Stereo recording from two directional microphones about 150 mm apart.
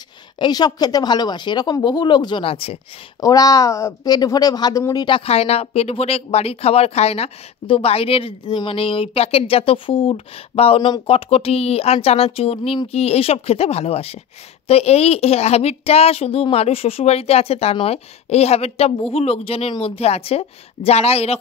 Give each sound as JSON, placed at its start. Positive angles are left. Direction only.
{"t": 0.4, "sound": "speech", "side_deg": 25}
{"t": 3.2, "sound": "a woman's voice", "side_deg": 25}